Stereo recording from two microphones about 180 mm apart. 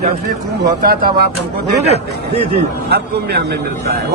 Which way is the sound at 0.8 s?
55° right (ahead or behind).